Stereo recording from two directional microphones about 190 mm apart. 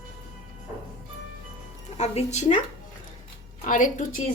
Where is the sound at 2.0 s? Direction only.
35° left (ahead or behind).